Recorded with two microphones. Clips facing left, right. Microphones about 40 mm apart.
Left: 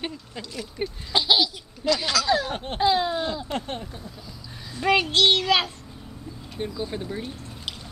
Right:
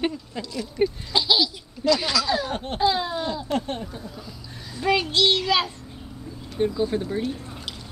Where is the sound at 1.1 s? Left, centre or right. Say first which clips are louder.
Left 6 dB; left.